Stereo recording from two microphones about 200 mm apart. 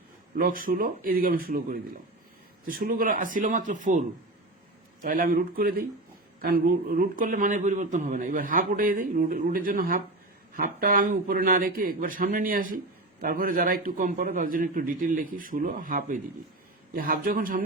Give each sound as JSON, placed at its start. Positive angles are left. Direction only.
{"t": 0.3, "sound": "speech", "side_deg": -45}
{"t": 5.0, "sound": "speech", "side_deg": -45}